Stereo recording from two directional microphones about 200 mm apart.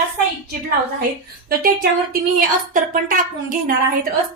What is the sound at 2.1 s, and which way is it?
A woman's voice, 45° right (ahead or behind).